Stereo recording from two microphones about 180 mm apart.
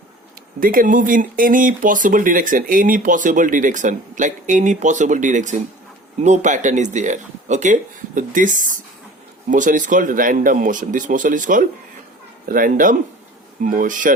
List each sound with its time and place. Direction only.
0.6 s speech: 50° right (ahead or behind)